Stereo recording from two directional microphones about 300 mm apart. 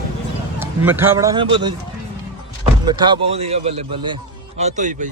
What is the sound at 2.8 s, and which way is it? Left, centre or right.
A man's voice, centre.